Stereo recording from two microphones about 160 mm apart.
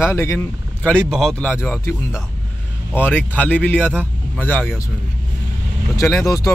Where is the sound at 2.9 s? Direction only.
10° left (ahead or behind).